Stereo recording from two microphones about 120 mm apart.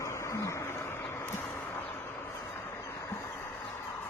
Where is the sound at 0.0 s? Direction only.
25° left (ahead or behind).